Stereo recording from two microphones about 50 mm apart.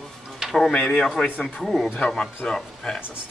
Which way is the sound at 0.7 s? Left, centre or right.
Centre.